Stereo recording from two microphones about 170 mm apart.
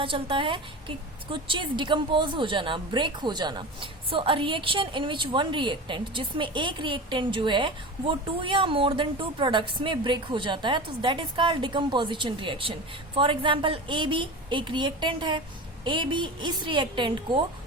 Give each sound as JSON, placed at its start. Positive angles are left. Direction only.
{"t": 0.0, "sound": "a woman's voice", "side_deg": -30}